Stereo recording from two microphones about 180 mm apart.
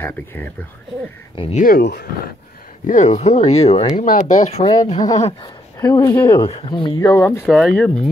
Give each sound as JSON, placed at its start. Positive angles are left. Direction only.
{"t": 0.0, "sound": "speech", "side_deg": 10}
{"t": 1.3, "sound": "speech", "side_deg": 30}
{"t": 1.6, "sound": "speech", "side_deg": 60}
{"t": 2.9, "sound": "speech", "side_deg": 40}
{"t": 4.9, "sound": "speech", "side_deg": 20}
{"t": 6.4, "sound": "speech", "side_deg": 30}
{"t": 7.4, "sound": "speech", "side_deg": 5}